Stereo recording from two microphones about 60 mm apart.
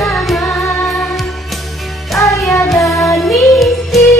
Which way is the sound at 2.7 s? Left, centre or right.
Centre.